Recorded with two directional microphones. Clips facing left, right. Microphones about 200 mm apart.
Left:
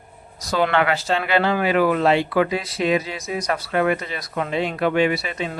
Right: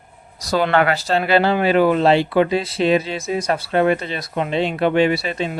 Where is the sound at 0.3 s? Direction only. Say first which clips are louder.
Right 3 dB; 35° right (ahead or behind).